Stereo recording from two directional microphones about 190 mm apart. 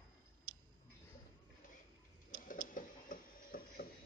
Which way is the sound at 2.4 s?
45° left (ahead or behind).